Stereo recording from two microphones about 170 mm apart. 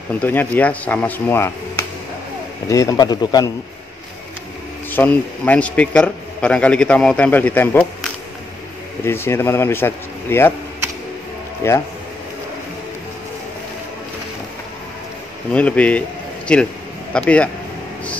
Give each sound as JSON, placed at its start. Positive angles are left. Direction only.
{"t": 0.1, "sound": "a man's voice", "side_deg": 10}
{"t": 4.9, "sound": "a man's voice", "side_deg": 10}
{"t": 9.0, "sound": "a man's voice", "side_deg": 15}
{"t": 11.6, "sound": "a man's voice", "side_deg": 15}
{"t": 15.5, "sound": "a man's voice", "side_deg": 10}